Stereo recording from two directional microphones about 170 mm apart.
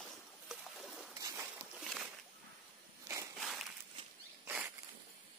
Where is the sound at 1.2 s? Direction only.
15° right (ahead or behind).